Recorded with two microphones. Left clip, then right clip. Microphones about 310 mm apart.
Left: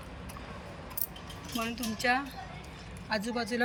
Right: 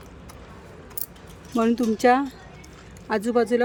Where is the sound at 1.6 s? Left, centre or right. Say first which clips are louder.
Right 13 dB; centre.